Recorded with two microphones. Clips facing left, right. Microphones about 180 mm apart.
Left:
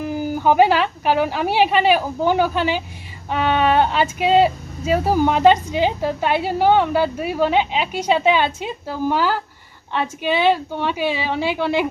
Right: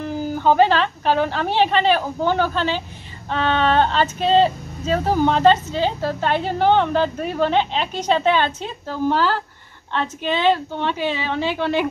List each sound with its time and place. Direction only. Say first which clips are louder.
0.0 s speech: left 1 dB; 10° left (ahead or behind)